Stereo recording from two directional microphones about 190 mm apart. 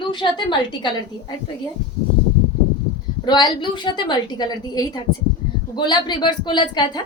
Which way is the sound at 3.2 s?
25° left (ahead or behind).